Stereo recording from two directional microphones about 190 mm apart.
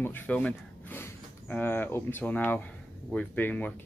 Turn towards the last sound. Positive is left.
turn(degrees=10)  # may be behind; listen again after turning